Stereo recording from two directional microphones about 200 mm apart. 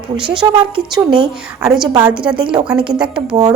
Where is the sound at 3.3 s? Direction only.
20° right (ahead or behind).